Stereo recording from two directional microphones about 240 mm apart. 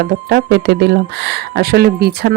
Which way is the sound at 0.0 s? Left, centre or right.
Right.